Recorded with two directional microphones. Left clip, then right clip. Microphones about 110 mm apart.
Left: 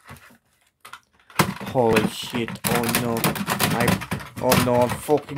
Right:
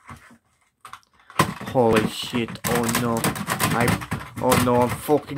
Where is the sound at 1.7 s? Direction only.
20° right (ahead or behind).